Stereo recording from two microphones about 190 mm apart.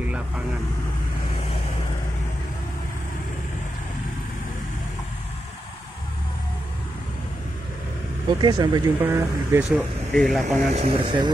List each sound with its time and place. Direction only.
8.3 s speech: 25° right (ahead or behind)
10.1 s speech: 5° left (ahead or behind)
10.8 s speech: 30° right (ahead or behind)